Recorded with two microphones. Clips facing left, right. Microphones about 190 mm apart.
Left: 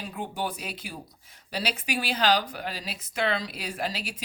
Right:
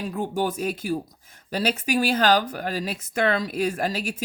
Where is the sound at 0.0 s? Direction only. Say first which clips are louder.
Right 7 dB; 45° right (ahead or behind).